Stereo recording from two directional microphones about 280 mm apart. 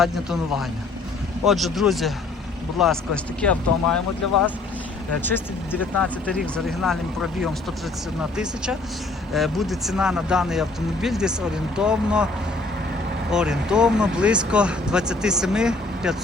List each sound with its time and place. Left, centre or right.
0.0 s speech: centre
5.2 s speech: centre
9.3 s speech: centre
13.3 s speech: centre